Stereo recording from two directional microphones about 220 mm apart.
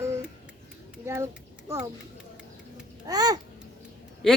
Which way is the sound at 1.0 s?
10° right (ahead or behind).